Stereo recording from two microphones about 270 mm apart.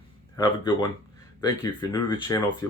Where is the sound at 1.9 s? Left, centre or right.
Centre.